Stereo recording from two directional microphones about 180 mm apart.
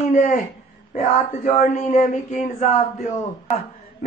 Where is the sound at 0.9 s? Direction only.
50° left (ahead or behind).